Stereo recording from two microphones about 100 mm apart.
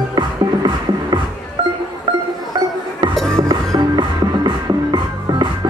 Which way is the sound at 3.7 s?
45° right (ahead or behind).